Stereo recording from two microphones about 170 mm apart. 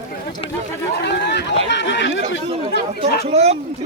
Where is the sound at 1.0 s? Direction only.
90° left.